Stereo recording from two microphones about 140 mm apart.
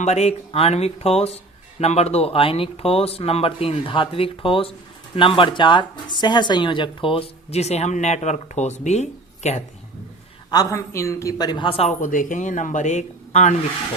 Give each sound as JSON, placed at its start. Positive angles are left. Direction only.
{"t": 0.0, "sound": "speech", "side_deg": 50}
{"t": 10.5, "sound": "a woman's voice", "side_deg": 25}
{"t": 11.9, "sound": "speech", "side_deg": 65}